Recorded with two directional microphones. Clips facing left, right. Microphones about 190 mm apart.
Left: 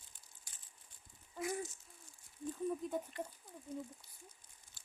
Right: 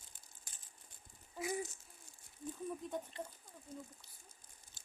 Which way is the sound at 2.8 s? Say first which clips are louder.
Left 3 dB; centre (ahead or behind).